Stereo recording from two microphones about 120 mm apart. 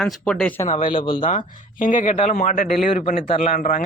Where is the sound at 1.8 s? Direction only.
90° left.